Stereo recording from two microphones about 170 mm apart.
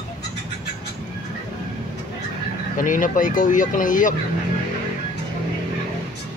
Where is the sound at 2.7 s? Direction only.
50° left (ahead or behind).